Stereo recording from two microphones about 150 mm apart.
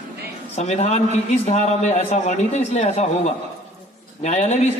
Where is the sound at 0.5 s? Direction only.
45° left (ahead or behind).